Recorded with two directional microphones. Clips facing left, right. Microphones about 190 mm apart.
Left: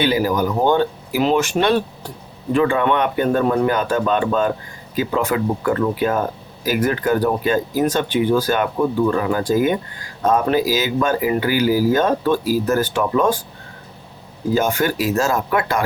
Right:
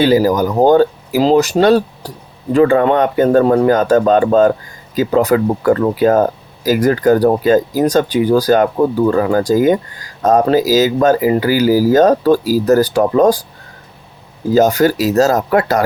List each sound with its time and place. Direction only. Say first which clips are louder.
0.0 s speech: right 6 dB; 40° right (ahead or behind)
14.5 s speech: right 8 dB; 40° right (ahead or behind)